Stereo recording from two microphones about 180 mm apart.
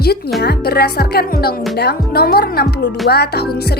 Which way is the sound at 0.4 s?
60° left (ahead or behind).